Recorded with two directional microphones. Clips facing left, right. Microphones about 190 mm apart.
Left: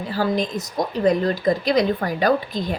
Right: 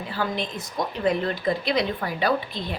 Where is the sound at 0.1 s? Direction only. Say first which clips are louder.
Left 7 dB; 40° left (ahead or behind).